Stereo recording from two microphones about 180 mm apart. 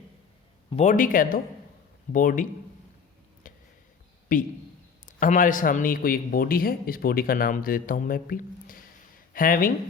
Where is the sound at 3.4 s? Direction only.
50° left (ahead or behind).